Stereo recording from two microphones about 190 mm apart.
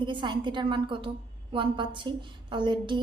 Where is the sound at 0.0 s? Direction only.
25° right (ahead or behind).